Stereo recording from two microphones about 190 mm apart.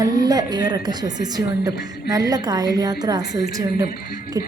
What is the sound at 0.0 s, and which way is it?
A woman's voice, 20° right (ahead or behind).